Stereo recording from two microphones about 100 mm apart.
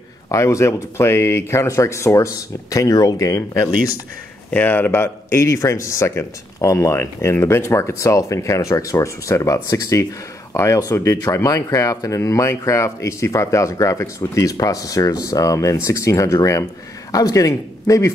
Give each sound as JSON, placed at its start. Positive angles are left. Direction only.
{"t": 0.3, "sound": "speech", "side_deg": 30}
{"t": 4.5, "sound": "speech", "side_deg": 20}